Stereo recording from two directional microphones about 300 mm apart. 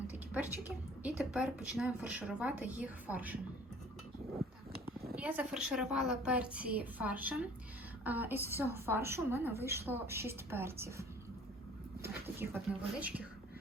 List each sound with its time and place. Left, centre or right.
0.1 s a sound: centre
1.0 s a woman's voice: centre
5.1 s a woman's voice: centre
12.0 s a woman's voice: centre